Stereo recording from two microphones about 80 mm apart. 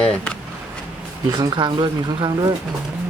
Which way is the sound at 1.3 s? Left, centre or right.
Right.